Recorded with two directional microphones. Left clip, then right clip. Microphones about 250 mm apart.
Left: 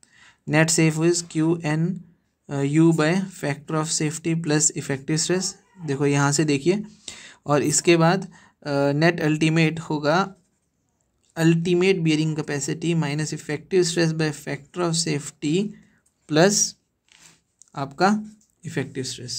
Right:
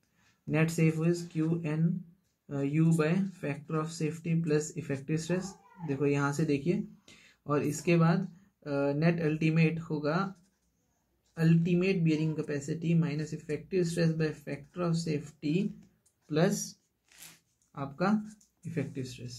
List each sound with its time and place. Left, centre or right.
0.5 s speech: left
11.3 s speech: left
17.7 s speech: left